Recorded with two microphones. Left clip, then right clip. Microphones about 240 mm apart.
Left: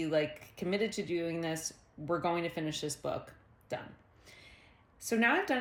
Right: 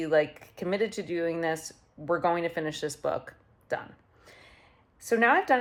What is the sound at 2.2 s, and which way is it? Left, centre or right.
Speech, centre.